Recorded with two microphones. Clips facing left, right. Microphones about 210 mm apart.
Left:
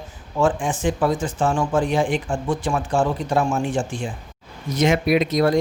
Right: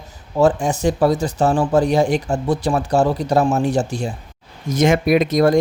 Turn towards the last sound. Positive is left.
turn(degrees=-45)  # may be behind; listen again after turning